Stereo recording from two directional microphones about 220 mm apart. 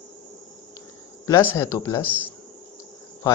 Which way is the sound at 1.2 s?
15° left (ahead or behind).